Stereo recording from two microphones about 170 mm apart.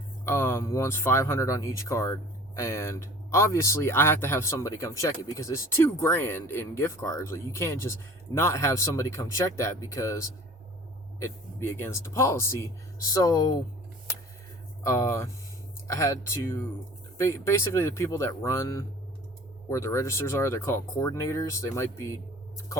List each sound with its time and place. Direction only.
0.3 s speech: 15° left (ahead or behind)
14.8 s speech: 20° left (ahead or behind)